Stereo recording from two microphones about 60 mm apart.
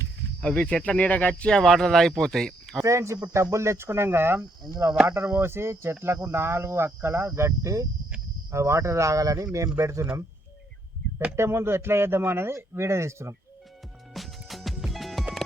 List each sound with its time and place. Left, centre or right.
0.4 s speech: centre
1.5 s speech: centre
2.8 s a man's voice: right
9.7 s speech: right
11.3 s a man's voice: right
14.1 s music: centre